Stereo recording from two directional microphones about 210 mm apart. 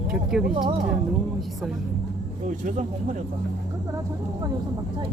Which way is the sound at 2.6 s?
35° right (ahead or behind).